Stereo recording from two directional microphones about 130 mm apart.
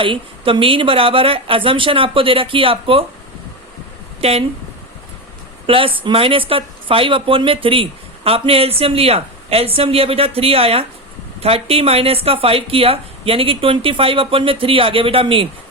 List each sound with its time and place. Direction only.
0.0 s speech: 40° right (ahead or behind)
4.2 s speech: 50° right (ahead or behind)
5.6 s speech: 45° right (ahead or behind)